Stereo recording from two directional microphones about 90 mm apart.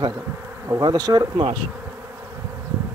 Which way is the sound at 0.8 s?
45° right (ahead or behind).